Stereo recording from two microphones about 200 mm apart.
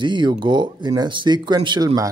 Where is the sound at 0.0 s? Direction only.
25° right (ahead or behind).